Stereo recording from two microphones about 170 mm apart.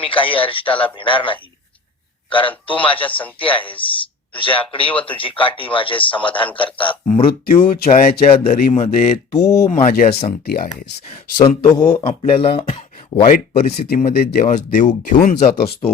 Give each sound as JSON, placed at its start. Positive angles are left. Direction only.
{"t": 0.0, "sound": "speech", "side_deg": 30}
{"t": 0.7, "sound": "a man's voice", "side_deg": 10}
{"t": 0.9, "sound": "speech", "side_deg": 30}
{"t": 2.6, "sound": "speech", "side_deg": 30}
{"t": 3.0, "sound": "a man's voice", "side_deg": 10}
{"t": 3.3, "sound": "speech", "side_deg": 30}
{"t": 7.4, "sound": "speech", "side_deg": 55}
{"t": 10.4, "sound": "speech", "side_deg": 60}
{"t": 11.1, "sound": "speech", "side_deg": 30}
{"t": 13.8, "sound": "speech", "side_deg": 60}
{"t": 14.4, "sound": "speech", "side_deg": 50}
{"t": 15.5, "sound": "speech", "side_deg": 70}